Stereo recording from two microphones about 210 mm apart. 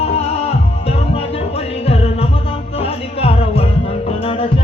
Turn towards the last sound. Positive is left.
turn(degrees=25)  # may be behind; listen again after turning